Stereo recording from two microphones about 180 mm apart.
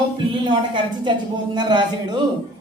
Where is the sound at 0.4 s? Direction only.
25° right (ahead or behind).